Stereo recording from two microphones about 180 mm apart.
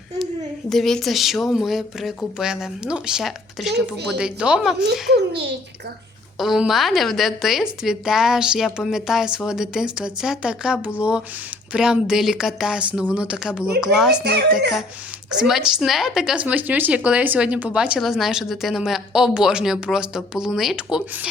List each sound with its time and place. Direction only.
0.7 s a woman's voice: centre (ahead or behind)
5.1 s a child's voice: 70° right (ahead or behind)
6.4 s a woman's voice: centre (ahead or behind)
15.3 s a woman's voice: 5° right (ahead or behind)